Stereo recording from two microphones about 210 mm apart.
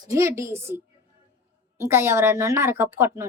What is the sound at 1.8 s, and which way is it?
A woman's voice, 10° right (ahead or behind).